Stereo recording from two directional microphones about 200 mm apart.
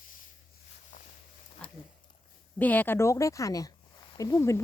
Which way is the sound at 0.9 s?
40° left (ahead or behind).